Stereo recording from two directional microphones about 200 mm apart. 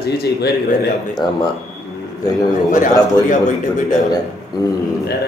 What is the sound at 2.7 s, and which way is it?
Speech, 40° left (ahead or behind).